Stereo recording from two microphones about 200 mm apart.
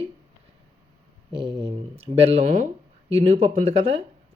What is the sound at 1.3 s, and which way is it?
Speech, 25° right (ahead or behind).